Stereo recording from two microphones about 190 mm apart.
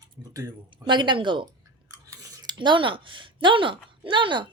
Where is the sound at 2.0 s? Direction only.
20° right (ahead or behind).